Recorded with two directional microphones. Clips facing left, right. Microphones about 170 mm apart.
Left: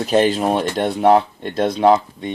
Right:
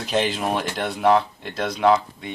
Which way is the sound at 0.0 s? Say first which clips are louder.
Left 7 dB; 40° left (ahead or behind).